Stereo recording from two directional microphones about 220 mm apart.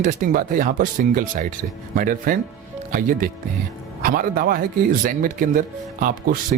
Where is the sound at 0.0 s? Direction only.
35° right (ahead or behind).